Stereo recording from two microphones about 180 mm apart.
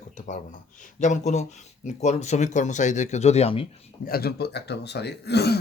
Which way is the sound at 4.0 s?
60° left (ahead or behind).